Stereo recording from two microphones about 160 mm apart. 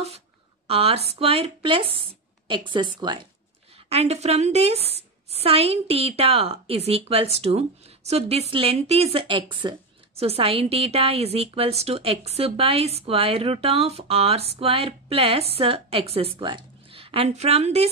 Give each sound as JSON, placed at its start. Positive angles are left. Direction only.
{"t": 0.7, "sound": "a woman's voice", "side_deg": -40}
{"t": 3.7, "sound": "a woman's voice", "side_deg": -40}